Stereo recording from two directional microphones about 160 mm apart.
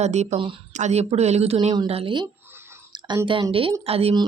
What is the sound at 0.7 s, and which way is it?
A woman's voice, 45° right (ahead or behind).